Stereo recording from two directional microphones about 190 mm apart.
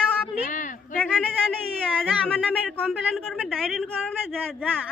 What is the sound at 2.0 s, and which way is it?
A woman's voice, 5° left (ahead or behind).